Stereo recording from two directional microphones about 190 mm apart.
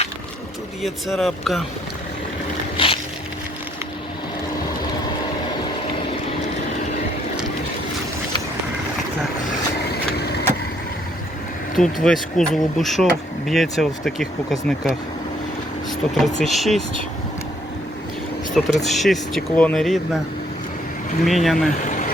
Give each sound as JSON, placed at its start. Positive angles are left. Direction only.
{"t": 0.8, "sound": "speech", "side_deg": 0}
{"t": 2.7, "sound": "a sound", "side_deg": 30}
{"t": 9.5, "sound": "vehicle", "side_deg": 55}
{"t": 11.8, "sound": "speech", "side_deg": 0}
{"t": 18.5, "sound": "speech", "side_deg": 0}
{"t": 21.2, "sound": "speech", "side_deg": 0}
{"t": 21.7, "sound": "vehicle", "side_deg": 40}